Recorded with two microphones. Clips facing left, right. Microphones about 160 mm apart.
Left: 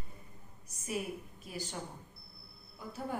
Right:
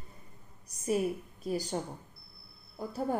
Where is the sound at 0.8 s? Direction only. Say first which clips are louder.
Right 8 dB; 40° right (ahead or behind).